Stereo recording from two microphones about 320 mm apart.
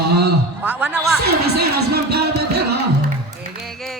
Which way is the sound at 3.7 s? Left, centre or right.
Centre.